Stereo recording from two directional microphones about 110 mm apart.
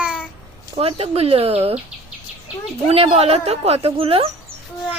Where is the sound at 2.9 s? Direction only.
65° right (ahead or behind).